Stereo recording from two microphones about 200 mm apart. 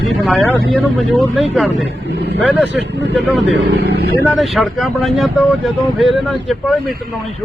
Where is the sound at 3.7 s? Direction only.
55° right (ahead or behind).